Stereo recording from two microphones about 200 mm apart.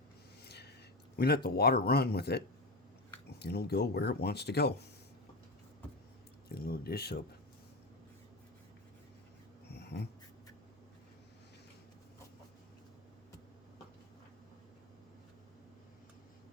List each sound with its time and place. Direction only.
0.4 s a sound: 55° left (ahead or behind)
1.2 s speech: 50° left (ahead or behind)
3.4 s speech: 55° left (ahead or behind)
6.5 s speech: 50° left (ahead or behind)
9.7 s dog: 55° left (ahead or behind)